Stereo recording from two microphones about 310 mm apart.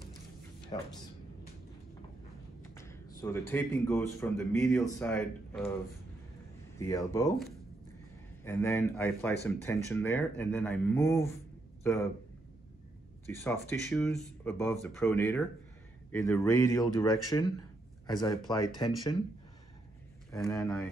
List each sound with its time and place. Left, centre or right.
0.7 s speech: centre
2.7 s speech: centre
6.8 s speech: centre
13.4 s speech: centre
20.2 s speech: centre